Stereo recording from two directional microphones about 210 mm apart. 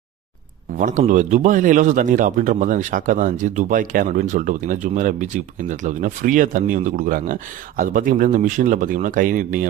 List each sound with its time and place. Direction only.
0.7 s a man's voice: 40° right (ahead or behind)